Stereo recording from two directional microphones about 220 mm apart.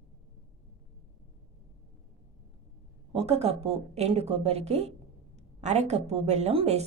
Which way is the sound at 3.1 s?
30° right (ahead or behind).